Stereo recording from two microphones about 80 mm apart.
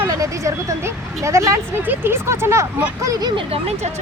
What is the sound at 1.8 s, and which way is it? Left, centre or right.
Speech, right.